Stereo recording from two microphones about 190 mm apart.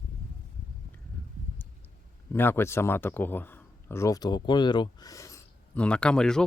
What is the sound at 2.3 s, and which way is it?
Speech, 10° left (ahead or behind).